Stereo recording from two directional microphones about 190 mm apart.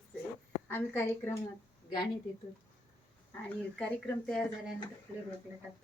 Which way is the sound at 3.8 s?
5° left (ahead or behind).